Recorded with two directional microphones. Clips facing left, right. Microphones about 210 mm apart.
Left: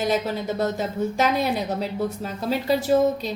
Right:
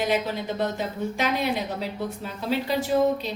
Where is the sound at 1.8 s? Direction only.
40° left (ahead or behind).